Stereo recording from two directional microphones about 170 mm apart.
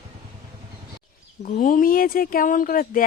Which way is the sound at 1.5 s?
50° left (ahead or behind).